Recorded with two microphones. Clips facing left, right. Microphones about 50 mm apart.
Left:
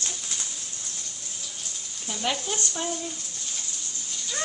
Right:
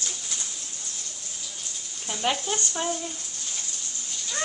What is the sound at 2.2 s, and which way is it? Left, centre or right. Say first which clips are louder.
Speech: right 2 dB; centre.